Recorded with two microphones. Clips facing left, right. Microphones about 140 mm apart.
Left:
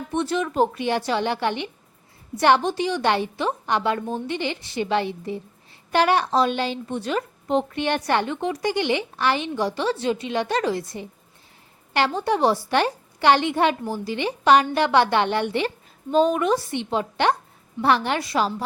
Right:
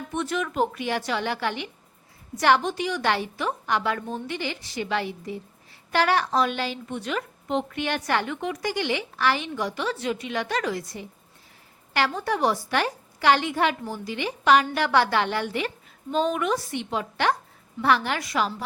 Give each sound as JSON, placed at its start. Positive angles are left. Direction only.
{"t": 0.1, "sound": "a woman's voice", "side_deg": 30}
{"t": 16.1, "sound": "a woman's voice", "side_deg": 40}